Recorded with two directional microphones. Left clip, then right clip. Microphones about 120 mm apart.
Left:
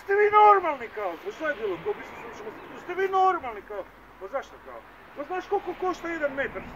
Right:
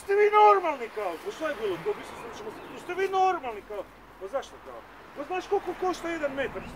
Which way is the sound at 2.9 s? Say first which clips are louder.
Left 2 dB; 10° right (ahead or behind).